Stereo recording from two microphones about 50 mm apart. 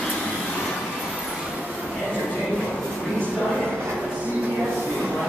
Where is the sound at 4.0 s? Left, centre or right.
Right.